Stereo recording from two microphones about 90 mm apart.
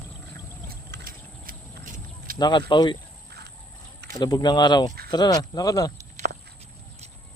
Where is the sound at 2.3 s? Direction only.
55° left (ahead or behind).